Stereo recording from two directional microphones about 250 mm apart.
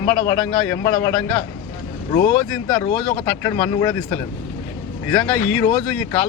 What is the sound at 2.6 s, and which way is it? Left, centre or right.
A man's voice, centre.